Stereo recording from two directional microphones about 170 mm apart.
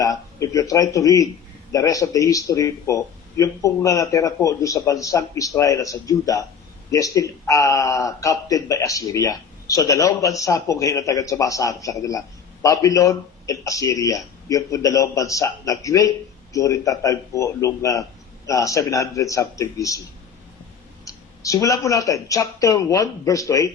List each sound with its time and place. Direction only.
0.0 s speech: 20° left (ahead or behind)
21.0 s speech: 20° left (ahead or behind)